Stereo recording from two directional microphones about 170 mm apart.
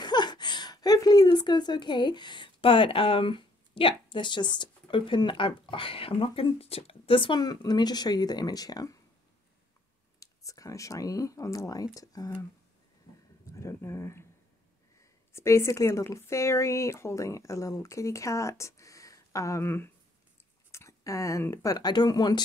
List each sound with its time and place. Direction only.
0.0 s a woman's voice: 25° left (ahead or behind)
10.2 s speech: 20° left (ahead or behind)
13.5 s speech: 15° left (ahead or behind)
15.3 s speech: 15° left (ahead or behind)